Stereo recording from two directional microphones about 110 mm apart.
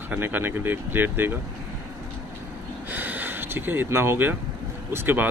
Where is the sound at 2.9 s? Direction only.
15° right (ahead or behind).